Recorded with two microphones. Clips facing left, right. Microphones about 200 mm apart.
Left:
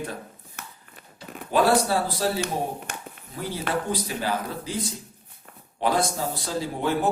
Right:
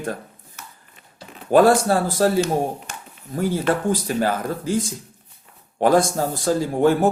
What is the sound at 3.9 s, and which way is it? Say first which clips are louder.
Speech: right 6 dB; 50° right (ahead or behind).